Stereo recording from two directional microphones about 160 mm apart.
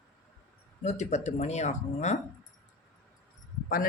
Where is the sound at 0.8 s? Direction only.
45° left (ahead or behind).